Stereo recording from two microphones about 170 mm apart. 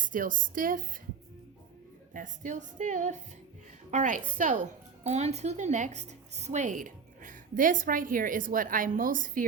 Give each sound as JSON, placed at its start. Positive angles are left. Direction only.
{"t": 0.0, "sound": "speech", "side_deg": -50}
{"t": 2.1, "sound": "speech", "side_deg": -50}
{"t": 5.0, "sound": "speech", "side_deg": -40}